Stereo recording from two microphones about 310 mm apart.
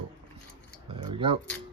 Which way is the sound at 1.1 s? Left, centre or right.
Centre.